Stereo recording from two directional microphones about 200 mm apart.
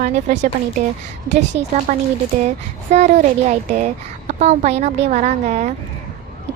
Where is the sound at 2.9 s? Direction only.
35° right (ahead or behind).